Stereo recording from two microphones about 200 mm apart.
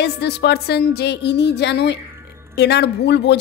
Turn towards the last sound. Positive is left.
turn(degrees=60)  # may be behind; listen again after turning